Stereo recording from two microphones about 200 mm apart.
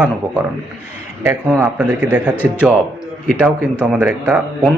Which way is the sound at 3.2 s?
5° right (ahead or behind).